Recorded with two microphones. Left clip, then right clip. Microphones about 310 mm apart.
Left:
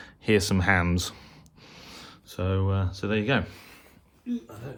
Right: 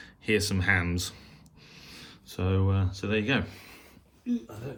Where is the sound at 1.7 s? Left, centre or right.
Centre.